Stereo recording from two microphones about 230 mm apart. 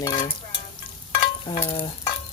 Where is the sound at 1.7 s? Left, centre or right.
Left.